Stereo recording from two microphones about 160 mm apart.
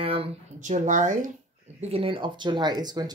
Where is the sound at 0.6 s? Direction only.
50° right (ahead or behind).